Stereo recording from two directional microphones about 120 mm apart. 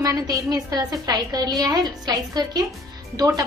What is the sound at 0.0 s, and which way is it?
A woman's voice, 30° right (ahead or behind).